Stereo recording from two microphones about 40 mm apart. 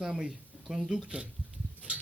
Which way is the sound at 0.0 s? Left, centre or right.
Centre.